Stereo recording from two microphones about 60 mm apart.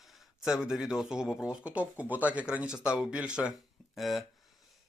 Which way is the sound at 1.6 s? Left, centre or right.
Right.